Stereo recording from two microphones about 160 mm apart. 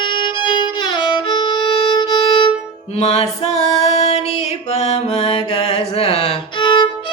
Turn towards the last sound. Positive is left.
turn(degrees=30)  # may be behind; listen again after turning